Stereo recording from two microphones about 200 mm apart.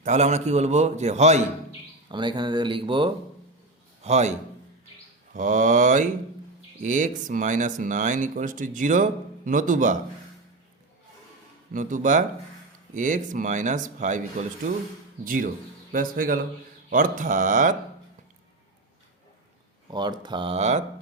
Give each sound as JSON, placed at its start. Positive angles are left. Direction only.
{"t": 0.0, "sound": "speech", "side_deg": -35}
{"t": 2.0, "sound": "speech", "side_deg": -25}
{"t": 11.7, "sound": "speech", "side_deg": -40}
{"t": 19.9, "sound": "speech", "side_deg": -20}